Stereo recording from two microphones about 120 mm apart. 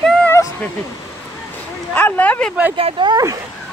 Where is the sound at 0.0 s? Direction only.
5° left (ahead or behind).